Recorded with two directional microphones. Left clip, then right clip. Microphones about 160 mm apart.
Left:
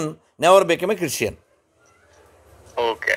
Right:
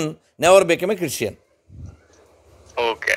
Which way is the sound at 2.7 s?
Centre (ahead or behind).